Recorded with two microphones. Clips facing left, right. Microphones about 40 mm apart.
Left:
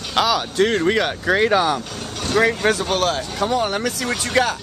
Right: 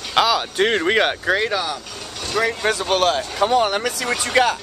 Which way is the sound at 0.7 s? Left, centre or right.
Right.